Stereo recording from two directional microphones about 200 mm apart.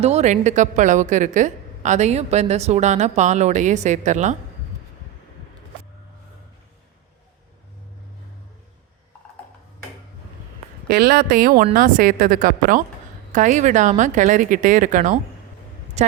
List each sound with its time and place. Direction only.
0.0 s a woman's voice: 35° right (ahead or behind)
10.8 s a woman's voice: 50° right (ahead or behind); by 16.1 s 35° right (ahead or behind)